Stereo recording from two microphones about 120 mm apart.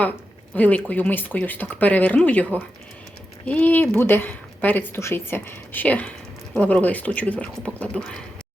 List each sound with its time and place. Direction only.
0.5 s speech: 15° left (ahead or behind)